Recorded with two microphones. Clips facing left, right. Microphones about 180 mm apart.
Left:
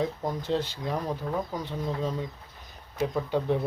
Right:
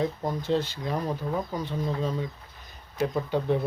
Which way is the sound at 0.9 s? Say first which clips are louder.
Even; centre (ahead or behind).